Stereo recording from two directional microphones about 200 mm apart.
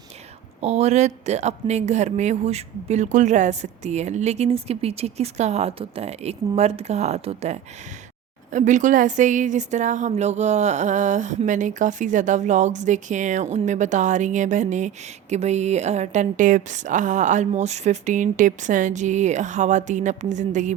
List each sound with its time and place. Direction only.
0.6 s a woman's voice: 30° right (ahead or behind)